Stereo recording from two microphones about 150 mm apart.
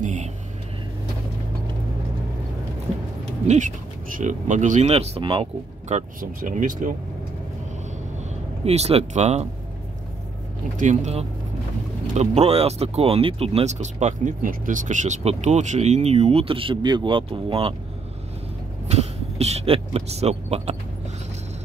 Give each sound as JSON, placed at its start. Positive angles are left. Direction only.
{"t": 0.0, "sound": "vehicle", "side_deg": -55}
{"t": 3.4, "sound": "speech", "side_deg": -55}
{"t": 8.2, "sound": "speech", "side_deg": -45}
{"t": 10.8, "sound": "speech", "side_deg": -55}
{"t": 18.9, "sound": "speech", "side_deg": -45}